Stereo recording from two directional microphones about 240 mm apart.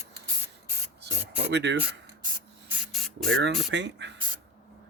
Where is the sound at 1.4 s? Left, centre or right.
Right.